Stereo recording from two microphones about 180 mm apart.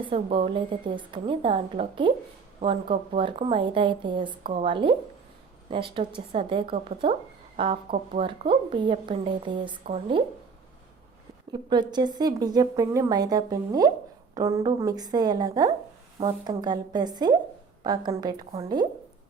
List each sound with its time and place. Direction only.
0.0 s a woman's voice: 30° right (ahead or behind)
11.5 s a woman's voice: 25° right (ahead or behind)